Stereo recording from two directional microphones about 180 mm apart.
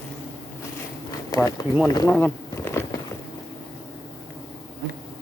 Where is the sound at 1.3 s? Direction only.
20° left (ahead or behind).